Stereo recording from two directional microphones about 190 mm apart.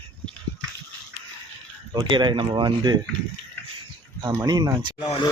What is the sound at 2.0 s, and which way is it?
Speech, 25° right (ahead or behind).